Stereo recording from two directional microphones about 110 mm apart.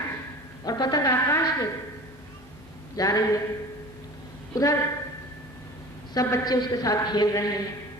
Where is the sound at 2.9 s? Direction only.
35° left (ahead or behind).